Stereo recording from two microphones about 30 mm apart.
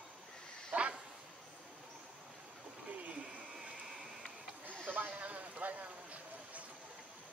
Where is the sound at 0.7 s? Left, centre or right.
Right.